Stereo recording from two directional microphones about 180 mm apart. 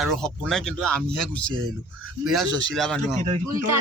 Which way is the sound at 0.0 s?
Centre (ahead or behind).